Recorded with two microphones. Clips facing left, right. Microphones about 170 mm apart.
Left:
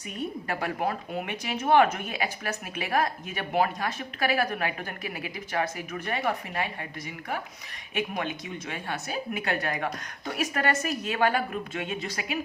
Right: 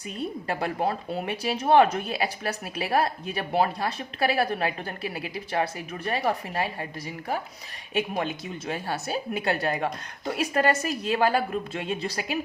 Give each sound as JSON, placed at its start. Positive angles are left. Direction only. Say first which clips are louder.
{"t": 0.2, "sound": "a woman's voice", "louder": "right 2 dB", "side_deg": -30}
{"t": 7.9, "sound": "a woman's voice", "louder": "right 3 dB", "side_deg": -30}